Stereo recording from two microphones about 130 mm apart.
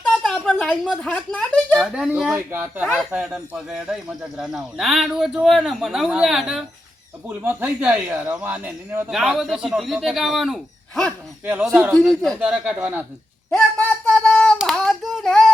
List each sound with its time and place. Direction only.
0.0 s a sound: 5° left (ahead or behind)
0.6 s speech: 10° left (ahead or behind)
1.9 s speech: 5° right (ahead or behind)
2.3 s speech: 15° right (ahead or behind)
7.3 s speech: 15° right (ahead or behind)
9.1 s speech: 5° right (ahead or behind)
11.7 s a man's voice: 20° right (ahead or behind)
12.4 s speech: 10° right (ahead or behind)
13.5 s a sound: 5° left (ahead or behind)
14.6 s child singing: 5° left (ahead or behind)